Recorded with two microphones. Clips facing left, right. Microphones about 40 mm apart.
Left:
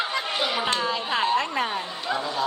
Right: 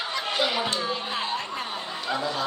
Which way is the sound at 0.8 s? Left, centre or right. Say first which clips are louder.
Left 4 dB; left.